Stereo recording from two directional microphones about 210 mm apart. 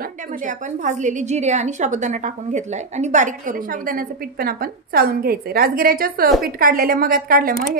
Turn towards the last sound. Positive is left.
turn(degrees=-45)  # may be behind; listen again after turning